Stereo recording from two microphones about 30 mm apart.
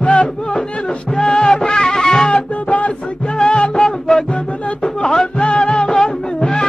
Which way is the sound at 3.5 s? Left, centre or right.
Left.